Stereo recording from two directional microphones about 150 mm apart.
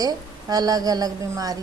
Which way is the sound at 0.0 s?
25° right (ahead or behind).